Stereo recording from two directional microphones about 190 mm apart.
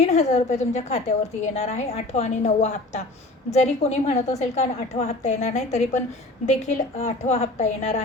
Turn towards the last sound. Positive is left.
turn(degrees=35)  # may be behind; listen again after turning